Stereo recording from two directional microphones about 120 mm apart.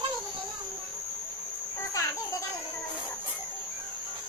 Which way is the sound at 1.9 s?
25° left (ahead or behind).